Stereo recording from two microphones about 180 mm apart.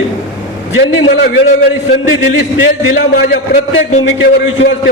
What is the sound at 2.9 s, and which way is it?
Speech, 65° left (ahead or behind).